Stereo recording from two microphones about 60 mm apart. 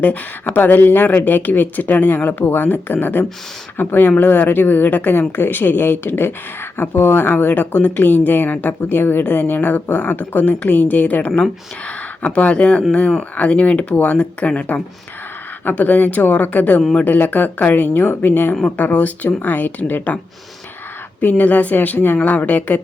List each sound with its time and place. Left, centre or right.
0.0 s speech: left
21.2 s speech: left